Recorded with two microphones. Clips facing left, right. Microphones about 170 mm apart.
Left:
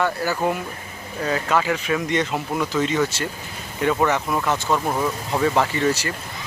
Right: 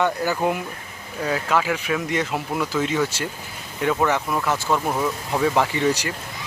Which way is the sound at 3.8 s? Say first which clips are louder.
Left 1 dB; centre (ahead or behind).